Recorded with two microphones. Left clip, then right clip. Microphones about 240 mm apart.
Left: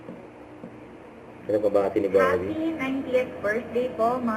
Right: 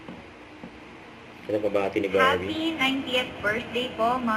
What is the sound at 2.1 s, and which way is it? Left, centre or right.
A woman's voice, centre.